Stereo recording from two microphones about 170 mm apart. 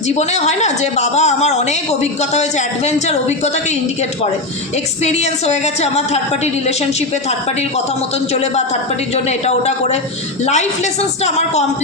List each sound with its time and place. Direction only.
0.1 s a woman's voice: 40° left (ahead or behind)
5.0 s a woman's voice: 40° left (ahead or behind)
9.1 s a woman's voice: 40° left (ahead or behind)